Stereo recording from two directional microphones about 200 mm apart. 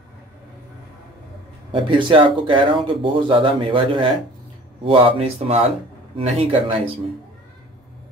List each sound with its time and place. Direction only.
1.7 s speech: 25° right (ahead or behind)